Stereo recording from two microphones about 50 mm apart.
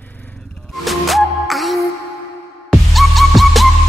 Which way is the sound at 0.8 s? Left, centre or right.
Centre.